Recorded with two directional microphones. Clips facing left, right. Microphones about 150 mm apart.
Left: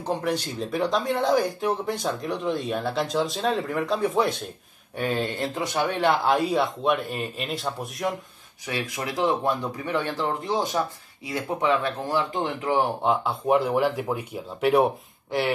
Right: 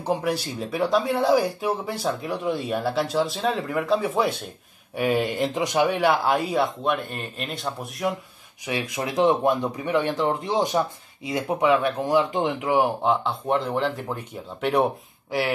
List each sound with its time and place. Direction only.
0.0 s speech: 10° right (ahead or behind)
8.6 s speech: 20° right (ahead or behind)
13.0 s speech: 5° left (ahead or behind)